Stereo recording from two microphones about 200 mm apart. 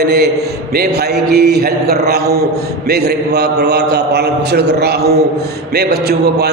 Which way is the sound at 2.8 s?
55° right (ahead or behind).